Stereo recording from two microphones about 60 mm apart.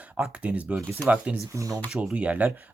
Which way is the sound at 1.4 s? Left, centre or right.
Right.